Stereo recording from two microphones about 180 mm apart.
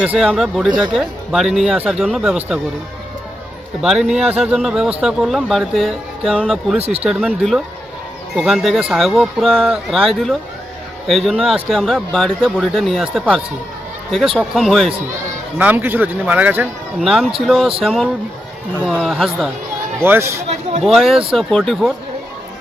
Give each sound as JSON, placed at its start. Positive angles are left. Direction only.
{"t": 0.0, "sound": "speech", "side_deg": -5}
{"t": 3.8, "sound": "speech", "side_deg": -5}
{"t": 6.7, "sound": "speech", "side_deg": -35}
{"t": 7.0, "sound": "speech", "side_deg": -5}
{"t": 15.5, "sound": "speech", "side_deg": -10}
{"t": 20.0, "sound": "speech", "side_deg": -15}
{"t": 20.8, "sound": "speech", "side_deg": 0}